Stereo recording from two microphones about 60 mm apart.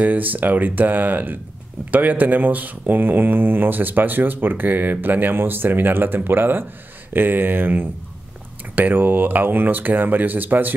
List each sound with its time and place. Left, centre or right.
0.0 s speech: right